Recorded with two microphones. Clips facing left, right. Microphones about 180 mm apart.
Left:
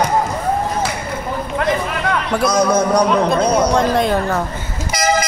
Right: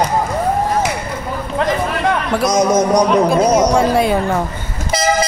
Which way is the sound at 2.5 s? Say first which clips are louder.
Right 2 dB; 20° right (ahead or behind).